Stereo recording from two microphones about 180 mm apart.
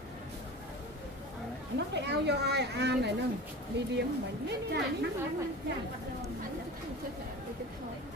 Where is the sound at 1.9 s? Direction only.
70° right (ahead or behind).